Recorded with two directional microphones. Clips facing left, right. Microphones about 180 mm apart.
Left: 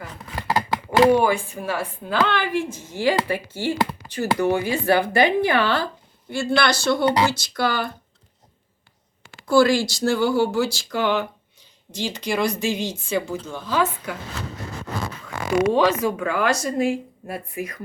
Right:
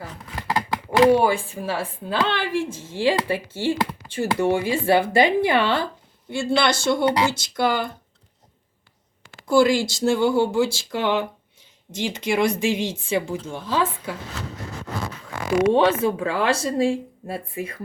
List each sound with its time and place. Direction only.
1.1 s a woman's voice: 30° right (ahead or behind)
9.5 s a woman's voice: 20° right (ahead or behind)
15.7 s a woman's voice: 30° right (ahead or behind)